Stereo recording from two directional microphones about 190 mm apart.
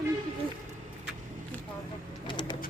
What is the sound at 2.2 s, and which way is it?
Bird, 25° left (ahead or behind).